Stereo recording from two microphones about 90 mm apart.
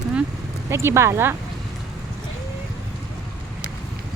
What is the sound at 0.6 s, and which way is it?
Speech, 30° right (ahead or behind).